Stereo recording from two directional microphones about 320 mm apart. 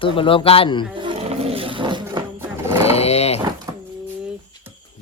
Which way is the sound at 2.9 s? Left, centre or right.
Centre.